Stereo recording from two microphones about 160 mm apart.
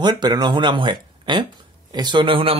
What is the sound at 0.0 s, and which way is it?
Speech, 25° right (ahead or behind).